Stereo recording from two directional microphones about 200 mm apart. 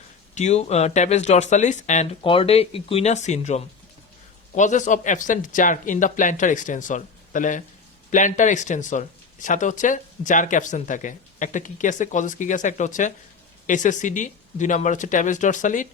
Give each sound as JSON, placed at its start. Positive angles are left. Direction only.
{"t": 0.3, "sound": "speech", "side_deg": 35}